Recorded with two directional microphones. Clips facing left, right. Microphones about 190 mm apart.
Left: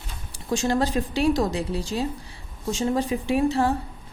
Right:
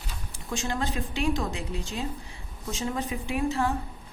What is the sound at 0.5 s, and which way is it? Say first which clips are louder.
A woman's voice: left 8 dB; 40° left (ahead or behind).